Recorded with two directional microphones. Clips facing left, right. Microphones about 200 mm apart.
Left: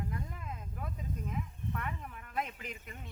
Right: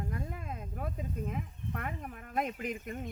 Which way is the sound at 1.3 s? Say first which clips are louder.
Right 1 dB; 45° right (ahead or behind).